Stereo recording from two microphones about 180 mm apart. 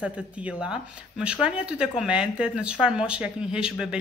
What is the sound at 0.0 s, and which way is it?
Speech, 5° right (ahead or behind).